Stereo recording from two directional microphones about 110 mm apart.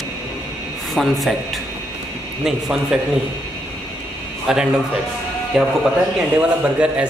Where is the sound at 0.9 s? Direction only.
Centre (ahead or behind).